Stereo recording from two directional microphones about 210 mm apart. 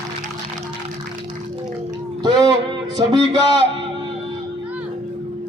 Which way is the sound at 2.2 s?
20° right (ahead or behind).